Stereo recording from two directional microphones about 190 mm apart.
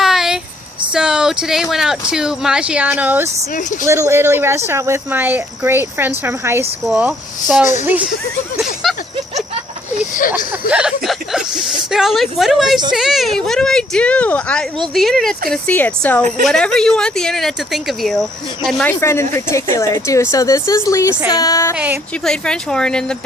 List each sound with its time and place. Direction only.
0.0 s a sound: centre (ahead or behind)
0.9 s speech: 5° right (ahead or behind)
6.8 s speech: centre (ahead or behind)
8.8 s a sound: centre (ahead or behind)
10.2 s speech: 45° left (ahead or behind)
10.7 s speech: 5° right (ahead or behind); by 21.8 s 15° left (ahead or behind)
22.2 s speech: 5° left (ahead or behind)